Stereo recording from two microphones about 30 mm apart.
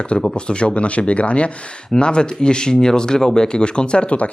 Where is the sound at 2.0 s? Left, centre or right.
Left.